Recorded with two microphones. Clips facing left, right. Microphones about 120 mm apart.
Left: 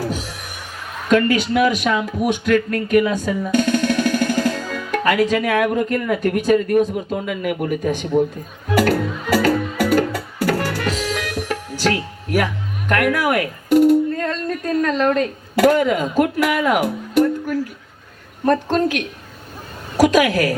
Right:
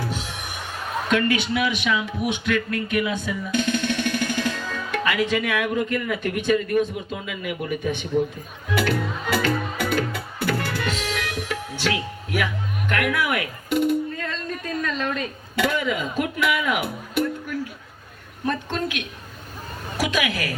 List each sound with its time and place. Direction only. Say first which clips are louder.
0.0 s music: left 5 dB; 40° left (ahead or behind)
1.1 s a man's voice: left 7 dB; 40° left (ahead or behind)
8.7 s music: left 6 dB; 45° left (ahead or behind)
12.9 s a woman's voice: left 6 dB; 40° left (ahead or behind)